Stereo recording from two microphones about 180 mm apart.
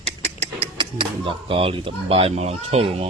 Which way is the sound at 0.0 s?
35° right (ahead or behind).